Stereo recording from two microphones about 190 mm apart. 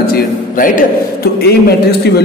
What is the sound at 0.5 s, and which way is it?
Speech, 45° left (ahead or behind).